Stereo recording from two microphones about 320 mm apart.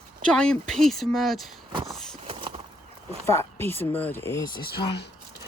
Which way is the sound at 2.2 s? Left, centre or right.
Centre.